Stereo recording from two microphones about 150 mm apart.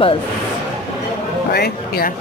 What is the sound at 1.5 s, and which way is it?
Speech, 90° left.